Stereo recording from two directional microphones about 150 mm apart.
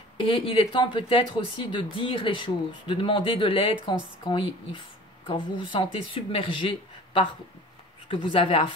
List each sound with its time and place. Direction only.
0.3 s speech: 35° left (ahead or behind)